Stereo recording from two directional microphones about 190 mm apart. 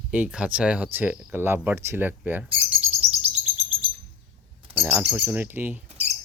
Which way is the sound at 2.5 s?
30° right (ahead or behind).